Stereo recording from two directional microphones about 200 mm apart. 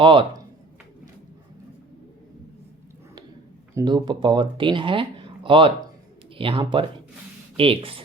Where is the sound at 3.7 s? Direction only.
20° right (ahead or behind).